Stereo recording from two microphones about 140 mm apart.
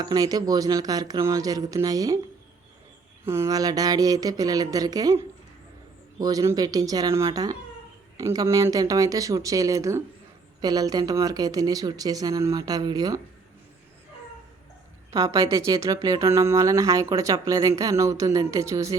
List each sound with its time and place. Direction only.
0.0 s speech: 30° right (ahead or behind)
3.2 s speech: 20° right (ahead or behind)
6.1 s speech: 25° right (ahead or behind)
15.1 s speech: 25° right (ahead or behind)